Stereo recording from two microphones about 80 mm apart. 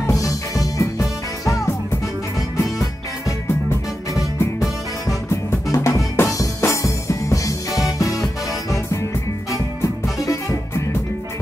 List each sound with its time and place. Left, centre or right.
0.0 s music: left
4.1 s music: left
10.1 s music: left